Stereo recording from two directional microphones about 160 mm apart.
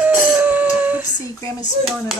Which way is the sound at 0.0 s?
10° right (ahead or behind).